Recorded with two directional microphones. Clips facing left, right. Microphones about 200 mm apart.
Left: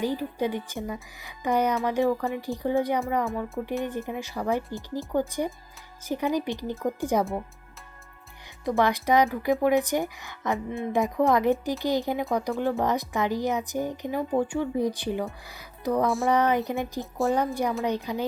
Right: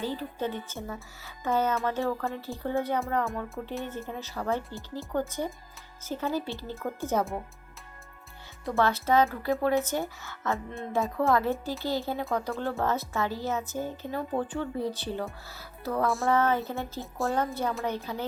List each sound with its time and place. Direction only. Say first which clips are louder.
0.0 s speech: left 5 dB; 15° left (ahead or behind)
3.2 s speech: left 4 dB; centre (ahead or behind)
3.8 s speech: left 5 dB; 15° left (ahead or behind)
8.6 s speech: left 3 dB; 15° left (ahead or behind)